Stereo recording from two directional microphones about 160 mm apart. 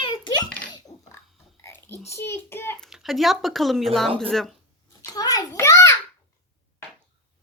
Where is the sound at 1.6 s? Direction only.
15° left (ahead or behind).